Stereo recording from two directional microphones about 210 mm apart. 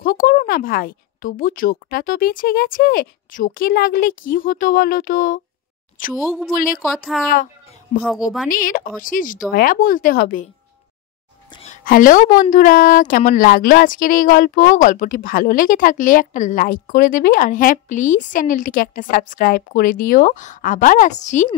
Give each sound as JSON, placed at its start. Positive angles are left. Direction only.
{"t": 0.0, "sound": "speech", "side_deg": 45}
{"t": 6.1, "sound": "speech", "side_deg": 0}
{"t": 8.5, "sound": "speech", "side_deg": 40}
{"t": 11.5, "sound": "a sound", "side_deg": 35}
{"t": 12.4, "sound": "speech", "side_deg": 40}